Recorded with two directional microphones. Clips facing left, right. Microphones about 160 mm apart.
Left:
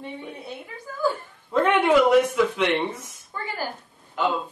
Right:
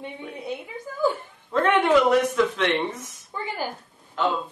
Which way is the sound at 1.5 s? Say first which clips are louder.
Even; 5° left (ahead or behind).